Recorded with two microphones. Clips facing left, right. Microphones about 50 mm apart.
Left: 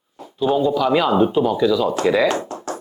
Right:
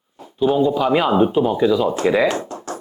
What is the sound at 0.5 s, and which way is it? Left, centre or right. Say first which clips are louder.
Speech: left 1 dB; right.